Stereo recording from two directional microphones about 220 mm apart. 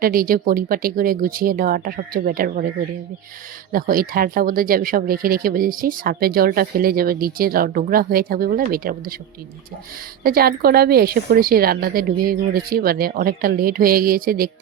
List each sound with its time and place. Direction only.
0.0 s speech: 40° right (ahead or behind)
3.7 s speech: 40° right (ahead or behind)
10.2 s speech: 45° right (ahead or behind)